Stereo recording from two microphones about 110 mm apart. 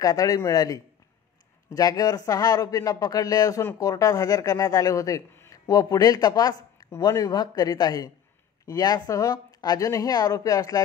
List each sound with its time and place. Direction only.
0.0 s speech: 35° left (ahead or behind)